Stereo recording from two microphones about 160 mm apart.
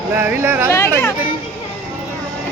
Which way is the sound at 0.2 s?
10° right (ahead or behind).